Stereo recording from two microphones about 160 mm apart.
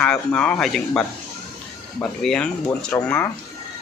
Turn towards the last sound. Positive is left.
turn(degrees=15)  # may be behind; listen again after turning